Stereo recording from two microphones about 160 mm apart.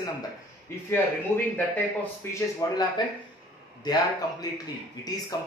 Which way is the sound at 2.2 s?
15° left (ahead or behind).